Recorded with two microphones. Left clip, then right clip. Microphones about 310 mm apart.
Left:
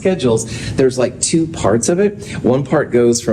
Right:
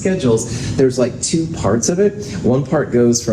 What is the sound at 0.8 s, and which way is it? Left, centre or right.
A man's voice, left.